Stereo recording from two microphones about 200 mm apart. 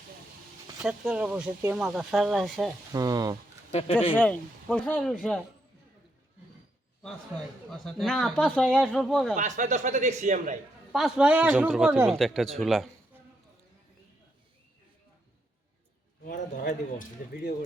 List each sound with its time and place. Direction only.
0.8 s speech: 5° right (ahead or behind)
2.9 s speech: 20° right (ahead or behind)
3.7 s speech: 30° left (ahead or behind)
4.2 s speech: 5° left (ahead or behind)
7.7 s speech: centre (ahead or behind)
9.3 s a man's voice: 40° right (ahead or behind)
10.9 s speech: 5° right (ahead or behind)
16.2 s speech: 45° left (ahead or behind)